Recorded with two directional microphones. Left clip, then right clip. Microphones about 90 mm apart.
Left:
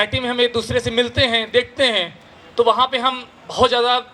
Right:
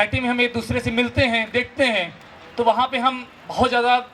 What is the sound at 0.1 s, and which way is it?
Speech, 40° left (ahead or behind).